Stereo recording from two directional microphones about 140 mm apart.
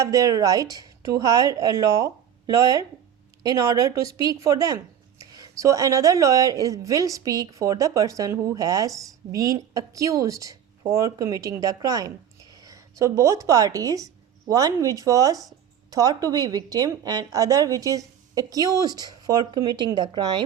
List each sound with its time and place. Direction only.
0.0 s speech: 25° right (ahead or behind)